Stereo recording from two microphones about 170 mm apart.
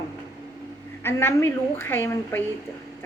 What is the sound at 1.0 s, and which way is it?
A woman's voice, 15° left (ahead or behind).